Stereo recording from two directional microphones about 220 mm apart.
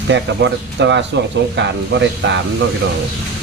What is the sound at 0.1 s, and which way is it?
Speech, 55° right (ahead or behind).